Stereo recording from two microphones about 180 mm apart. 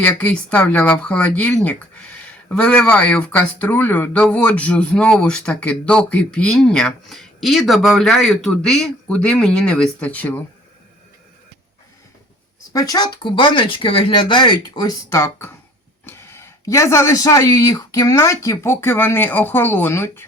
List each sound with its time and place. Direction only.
0.0 s speech: 10° left (ahead or behind)
12.7 s speech: 20° left (ahead or behind)